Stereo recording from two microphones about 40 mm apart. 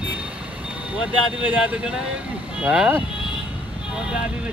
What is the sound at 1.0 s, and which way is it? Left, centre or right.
Speech, right.